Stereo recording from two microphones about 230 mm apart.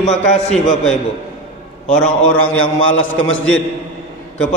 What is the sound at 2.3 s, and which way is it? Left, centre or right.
A man's voice, left.